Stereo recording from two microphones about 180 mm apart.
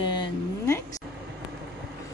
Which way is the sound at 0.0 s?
25° left (ahead or behind).